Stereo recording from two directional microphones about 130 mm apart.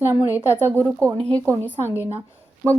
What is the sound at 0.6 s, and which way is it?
Speech, 15° right (ahead or behind).